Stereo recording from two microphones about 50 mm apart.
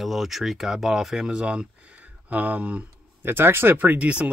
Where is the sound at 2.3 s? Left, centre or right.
Right.